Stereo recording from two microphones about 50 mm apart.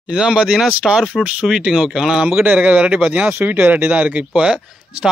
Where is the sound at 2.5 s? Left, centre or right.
Right.